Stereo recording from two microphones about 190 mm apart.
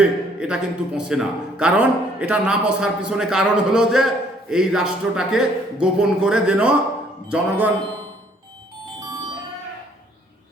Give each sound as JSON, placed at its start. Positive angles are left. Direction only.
{"t": 0.0, "sound": "a man's voice", "side_deg": -5}